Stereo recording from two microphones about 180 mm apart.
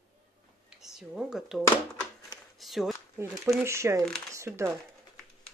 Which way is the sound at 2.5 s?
Centre (ahead or behind).